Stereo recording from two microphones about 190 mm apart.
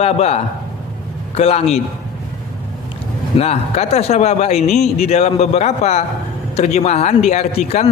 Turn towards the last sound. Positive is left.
turn(degrees=35)  # may be behind; listen again after turning